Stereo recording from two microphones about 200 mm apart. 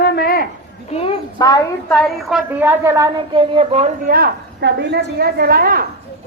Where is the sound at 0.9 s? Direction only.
30° left (ahead or behind).